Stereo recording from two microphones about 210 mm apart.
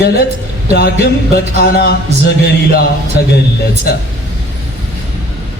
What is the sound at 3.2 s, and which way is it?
Speech, 50° left (ahead or behind).